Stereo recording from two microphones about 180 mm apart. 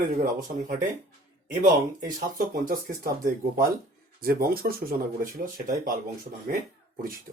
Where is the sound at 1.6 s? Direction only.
50° right (ahead or behind).